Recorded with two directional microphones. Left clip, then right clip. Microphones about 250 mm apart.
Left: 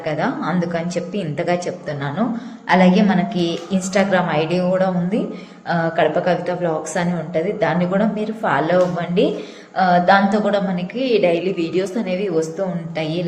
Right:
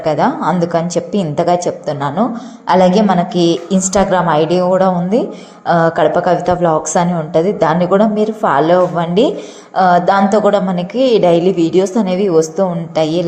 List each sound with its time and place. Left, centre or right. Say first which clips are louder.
0.0 s a woman's voice: right 8 dB; right